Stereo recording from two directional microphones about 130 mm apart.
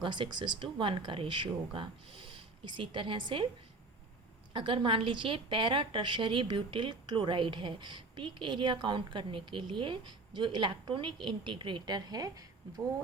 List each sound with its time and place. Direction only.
0.0 s a woman's voice: 35° right (ahead or behind)
4.5 s a woman's voice: 40° right (ahead or behind)